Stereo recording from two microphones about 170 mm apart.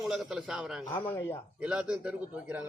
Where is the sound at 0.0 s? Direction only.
Centre (ahead or behind).